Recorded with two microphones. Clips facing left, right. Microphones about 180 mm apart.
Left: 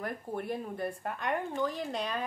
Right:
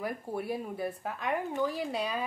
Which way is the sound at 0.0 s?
5° right (ahead or behind).